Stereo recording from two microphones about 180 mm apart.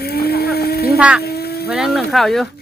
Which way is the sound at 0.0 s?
60° left (ahead or behind).